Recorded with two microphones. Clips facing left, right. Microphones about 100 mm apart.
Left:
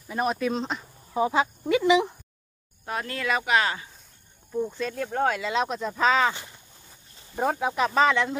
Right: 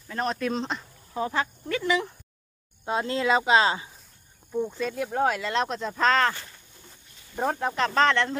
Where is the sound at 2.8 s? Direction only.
20° right (ahead or behind).